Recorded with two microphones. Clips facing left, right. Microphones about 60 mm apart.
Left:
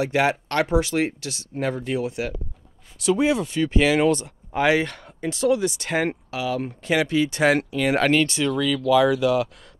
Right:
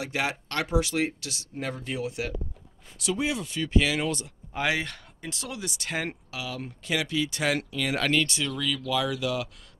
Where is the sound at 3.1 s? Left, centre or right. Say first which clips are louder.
Left 8 dB; left.